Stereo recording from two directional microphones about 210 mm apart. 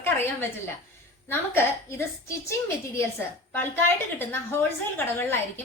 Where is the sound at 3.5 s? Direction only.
10° left (ahead or behind).